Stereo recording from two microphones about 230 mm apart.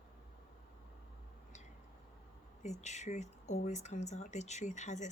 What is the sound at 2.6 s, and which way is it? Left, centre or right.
A woman's voice, left.